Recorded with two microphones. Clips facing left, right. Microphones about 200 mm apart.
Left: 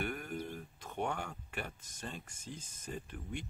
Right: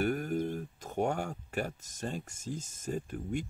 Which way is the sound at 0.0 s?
40° right (ahead or behind).